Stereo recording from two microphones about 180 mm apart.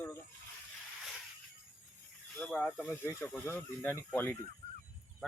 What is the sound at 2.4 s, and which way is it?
Speech, 5° left (ahead or behind).